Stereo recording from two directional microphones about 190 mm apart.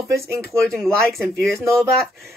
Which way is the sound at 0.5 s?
Centre (ahead or behind).